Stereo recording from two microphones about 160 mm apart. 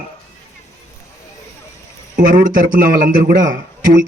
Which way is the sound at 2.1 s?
60° right (ahead or behind).